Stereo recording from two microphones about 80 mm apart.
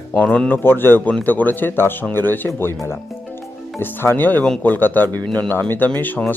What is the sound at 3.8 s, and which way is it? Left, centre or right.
Speech, left.